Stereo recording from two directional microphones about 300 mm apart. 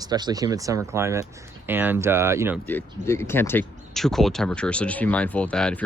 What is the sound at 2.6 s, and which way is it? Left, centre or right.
Speech, centre.